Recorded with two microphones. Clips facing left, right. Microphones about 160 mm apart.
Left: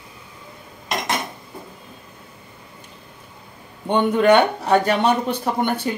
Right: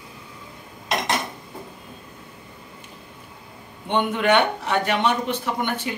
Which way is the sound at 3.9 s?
40° left (ahead or behind).